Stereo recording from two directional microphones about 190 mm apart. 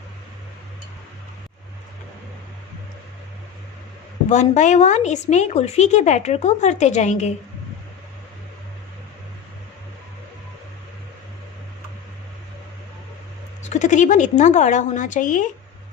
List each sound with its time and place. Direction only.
4.3 s speech: 40° left (ahead or behind)
13.6 s speech: 40° left (ahead or behind)